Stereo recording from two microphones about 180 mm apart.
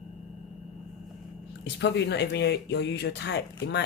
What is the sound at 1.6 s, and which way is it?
Speech, 70° left (ahead or behind).